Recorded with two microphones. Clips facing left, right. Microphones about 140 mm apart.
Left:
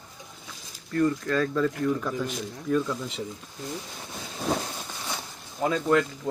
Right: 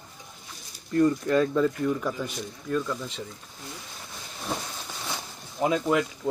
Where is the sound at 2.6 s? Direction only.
5° left (ahead or behind).